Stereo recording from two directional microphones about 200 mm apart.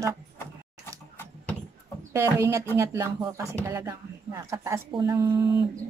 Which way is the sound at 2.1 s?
15° right (ahead or behind).